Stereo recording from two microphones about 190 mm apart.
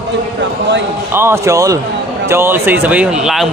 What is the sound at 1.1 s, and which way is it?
Speech, 15° right (ahead or behind).